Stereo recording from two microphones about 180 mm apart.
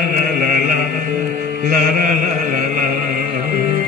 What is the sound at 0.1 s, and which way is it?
Chant, 50° right (ahead or behind).